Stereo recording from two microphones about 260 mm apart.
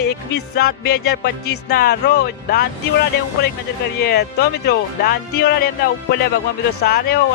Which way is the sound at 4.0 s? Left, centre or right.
Left.